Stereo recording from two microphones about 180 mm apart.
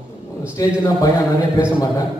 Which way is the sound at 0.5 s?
20° left (ahead or behind).